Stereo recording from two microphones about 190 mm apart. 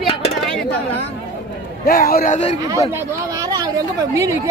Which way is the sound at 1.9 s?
50° left (ahead or behind).